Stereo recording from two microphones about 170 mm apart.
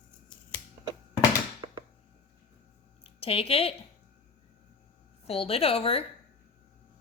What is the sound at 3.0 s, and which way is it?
Speech, 35° left (ahead or behind).